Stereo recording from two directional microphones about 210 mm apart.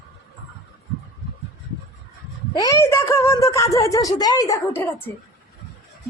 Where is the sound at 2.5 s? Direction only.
15° left (ahead or behind).